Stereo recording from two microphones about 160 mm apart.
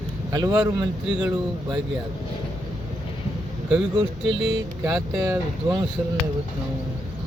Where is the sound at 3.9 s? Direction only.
30° right (ahead or behind).